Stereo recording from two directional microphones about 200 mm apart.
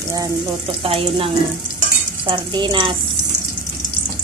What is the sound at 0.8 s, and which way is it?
Stir, 30° right (ahead or behind).